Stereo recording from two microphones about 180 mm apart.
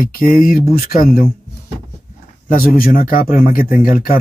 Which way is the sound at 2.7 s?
50° left (ahead or behind).